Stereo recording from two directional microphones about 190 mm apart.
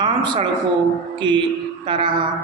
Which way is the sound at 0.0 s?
25° right (ahead or behind).